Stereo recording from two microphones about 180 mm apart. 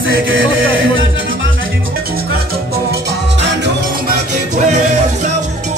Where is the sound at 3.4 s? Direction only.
75° right (ahead or behind).